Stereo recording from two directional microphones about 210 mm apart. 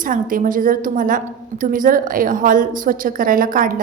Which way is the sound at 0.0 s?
40° right (ahead or behind).